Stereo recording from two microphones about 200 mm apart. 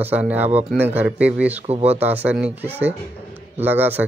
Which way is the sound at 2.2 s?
5° right (ahead or behind).